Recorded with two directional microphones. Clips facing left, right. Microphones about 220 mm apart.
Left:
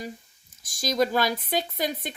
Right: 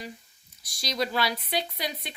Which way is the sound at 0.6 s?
50° left (ahead or behind).